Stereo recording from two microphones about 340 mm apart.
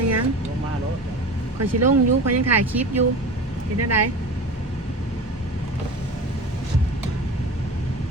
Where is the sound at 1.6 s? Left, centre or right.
Right.